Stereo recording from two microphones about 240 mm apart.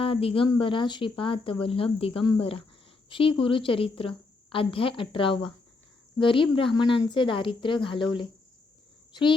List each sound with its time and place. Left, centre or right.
0.0 s speech: left